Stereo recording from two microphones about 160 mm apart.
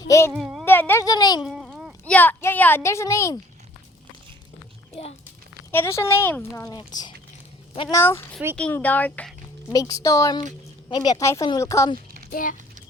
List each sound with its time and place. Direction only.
0.3 s a child's voice: centre (ahead or behind)
0.6 s a woman's voice: 15° left (ahead or behind)
1.4 s a sound: 5° right (ahead or behind)
2.0 s a woman's voice: 10° left (ahead or behind)
5.7 s a woman's voice: 15° left (ahead or behind)
9.7 s speech: 20° left (ahead or behind)
12.3 s a child's voice: 55° left (ahead or behind)